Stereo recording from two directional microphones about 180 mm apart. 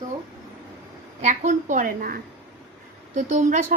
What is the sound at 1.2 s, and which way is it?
A woman's voice, 40° right (ahead or behind).